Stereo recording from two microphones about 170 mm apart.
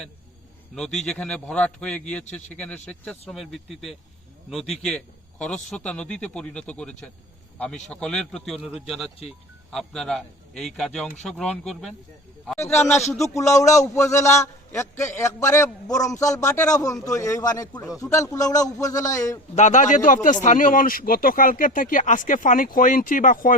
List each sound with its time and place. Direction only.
0.8 s a man's voice: 5° left (ahead or behind)
12.7 s a man's voice: 15° left (ahead or behind)
13.1 s a man's voice: centre (ahead or behind)
13.5 s a man's voice: 20° left (ahead or behind)
19.5 s speech: 45° left (ahead or behind)